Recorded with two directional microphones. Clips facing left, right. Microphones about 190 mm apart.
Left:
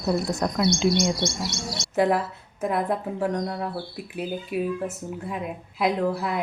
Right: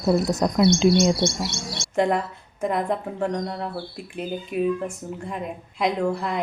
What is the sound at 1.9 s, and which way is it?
Speech, 5° left (ahead or behind).